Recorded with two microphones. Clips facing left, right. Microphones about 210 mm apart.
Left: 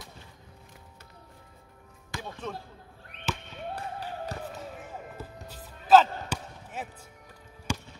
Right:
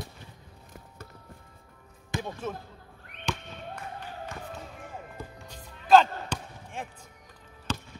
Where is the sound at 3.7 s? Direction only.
35° left (ahead or behind).